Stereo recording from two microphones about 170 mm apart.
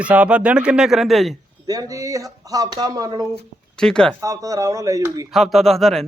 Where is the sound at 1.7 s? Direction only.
20° right (ahead or behind).